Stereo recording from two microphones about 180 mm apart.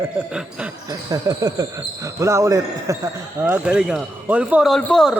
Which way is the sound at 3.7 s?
5° right (ahead or behind).